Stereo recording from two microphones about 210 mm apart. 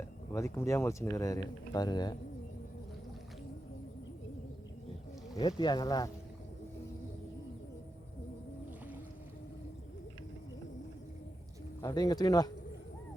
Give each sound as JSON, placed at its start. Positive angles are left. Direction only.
{"t": 0.3, "sound": "speech", "side_deg": 15}
{"t": 5.3, "sound": "speech", "side_deg": 20}
{"t": 11.8, "sound": "speech", "side_deg": 15}